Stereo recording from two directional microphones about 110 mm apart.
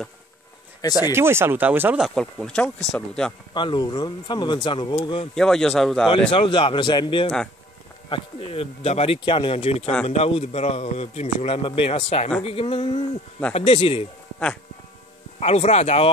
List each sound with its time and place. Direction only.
1.1 s speech: 20° right (ahead or behind)
2.0 s speech: centre (ahead or behind)
3.5 s speech: 45° left (ahead or behind)
5.3 s speech: 5° left (ahead or behind)
6.3 s speech: 50° left (ahead or behind)
8.1 s speech: 60° left (ahead or behind)
9.2 s a man's voice: 50° left (ahead or behind); by 12.3 s 70° left (ahead or behind)
12.4 s speech: 60° left (ahead or behind)
15.3 s a man's voice: 75° left (ahead or behind)